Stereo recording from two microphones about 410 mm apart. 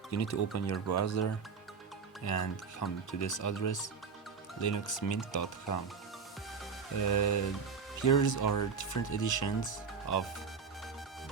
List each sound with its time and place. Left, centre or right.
0.1 s speech: left
7.1 s speech: left